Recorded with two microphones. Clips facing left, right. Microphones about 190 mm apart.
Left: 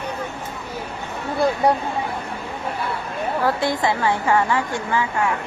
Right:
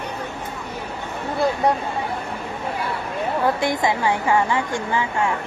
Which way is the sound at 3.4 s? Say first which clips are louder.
Even; 15° right (ahead or behind).